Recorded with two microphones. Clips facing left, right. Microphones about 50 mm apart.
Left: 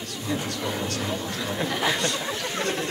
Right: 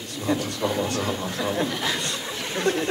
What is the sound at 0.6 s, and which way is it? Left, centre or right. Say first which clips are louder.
A man's voice: right 4 dB; centre.